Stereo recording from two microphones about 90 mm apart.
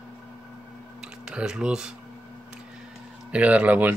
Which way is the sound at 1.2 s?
10° right (ahead or behind).